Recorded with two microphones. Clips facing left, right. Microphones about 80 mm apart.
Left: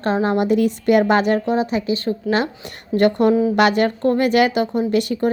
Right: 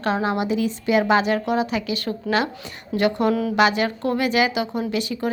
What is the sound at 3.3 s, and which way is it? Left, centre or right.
Speech, left.